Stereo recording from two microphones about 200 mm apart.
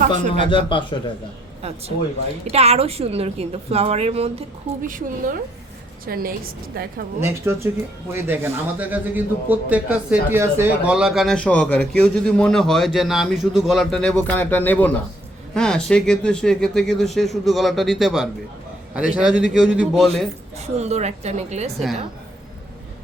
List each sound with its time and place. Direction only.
0.3 s a man's voice: 25° left (ahead or behind)
1.6 s a woman's voice: 30° right (ahead or behind)
4.8 s a woman's voice: 45° right (ahead or behind)
7.2 s a man's voice: 10° right (ahead or behind)
20.6 s a woman's voice: 35° right (ahead or behind)